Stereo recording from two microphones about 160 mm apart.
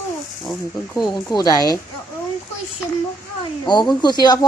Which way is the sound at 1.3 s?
25° left (ahead or behind).